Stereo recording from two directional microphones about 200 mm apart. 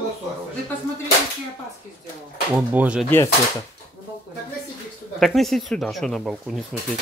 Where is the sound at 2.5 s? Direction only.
5° right (ahead or behind).